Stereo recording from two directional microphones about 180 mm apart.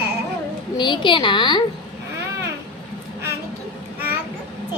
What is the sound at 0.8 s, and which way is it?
Speech, 25° left (ahead or behind).